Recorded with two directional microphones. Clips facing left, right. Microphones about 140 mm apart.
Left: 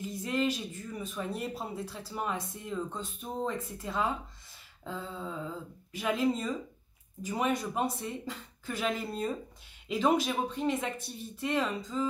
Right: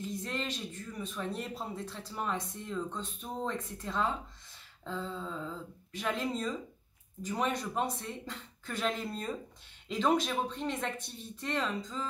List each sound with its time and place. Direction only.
0.0 s speech: 5° left (ahead or behind)